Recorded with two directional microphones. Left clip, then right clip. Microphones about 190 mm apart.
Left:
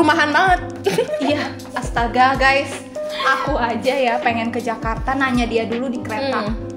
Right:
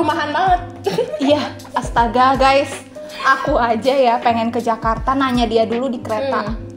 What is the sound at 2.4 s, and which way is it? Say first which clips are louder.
A woman's voice: right 2 dB; 35° right (ahead or behind).